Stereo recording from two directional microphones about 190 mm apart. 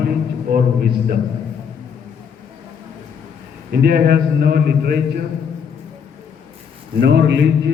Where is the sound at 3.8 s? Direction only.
55° right (ahead or behind).